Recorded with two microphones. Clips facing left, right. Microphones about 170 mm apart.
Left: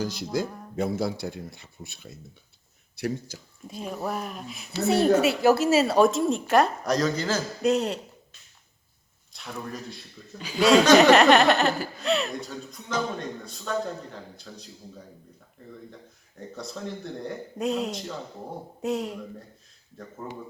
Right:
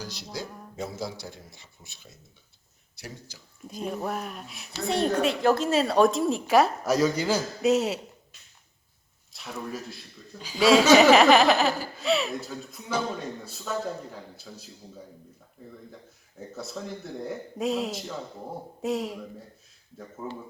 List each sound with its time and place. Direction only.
0.0 s speech: 50° left (ahead or behind)
3.7 s speech: centre (ahead or behind)
9.3 s speech: 5° right (ahead or behind)
10.3 s speech: 65° left (ahead or behind)
10.6 s speech: centre (ahead or behind)
16.4 s speech: 5° right (ahead or behind)